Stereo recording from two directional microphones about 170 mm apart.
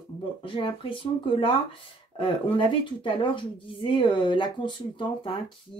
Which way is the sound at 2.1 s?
30° left (ahead or behind).